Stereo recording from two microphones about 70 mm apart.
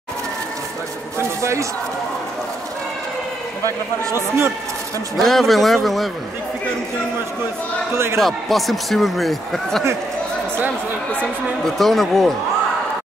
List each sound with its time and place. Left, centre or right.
1.1 s a sound: right
4.0 s a man's voice: right
5.1 s speech: centre
7.9 s a man's voice: right
8.2 s speech: centre
11.6 s speech: centre